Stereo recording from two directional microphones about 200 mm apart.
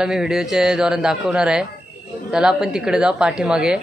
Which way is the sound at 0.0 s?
5° right (ahead or behind).